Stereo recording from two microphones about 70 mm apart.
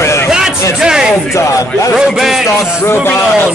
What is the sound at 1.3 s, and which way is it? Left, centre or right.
Speech, left.